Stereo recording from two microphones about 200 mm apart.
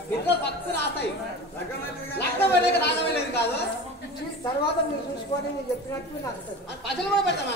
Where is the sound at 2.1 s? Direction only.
55° left (ahead or behind).